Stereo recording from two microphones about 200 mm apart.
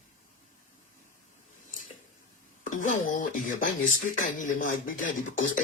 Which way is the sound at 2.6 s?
40° left (ahead or behind).